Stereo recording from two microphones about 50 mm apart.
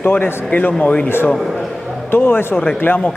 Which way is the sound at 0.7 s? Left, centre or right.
Centre.